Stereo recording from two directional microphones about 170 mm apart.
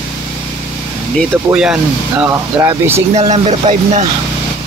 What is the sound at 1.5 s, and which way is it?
Speech, 5° right (ahead or behind).